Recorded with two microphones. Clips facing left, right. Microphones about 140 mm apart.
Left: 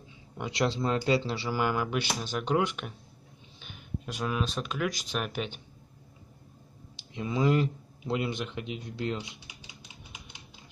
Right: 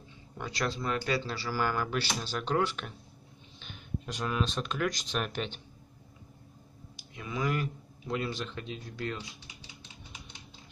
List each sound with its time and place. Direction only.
0.4 s speech: 25° left (ahead or behind); by 5.6 s 10° left (ahead or behind)
7.0 s speech: 25° left (ahead or behind)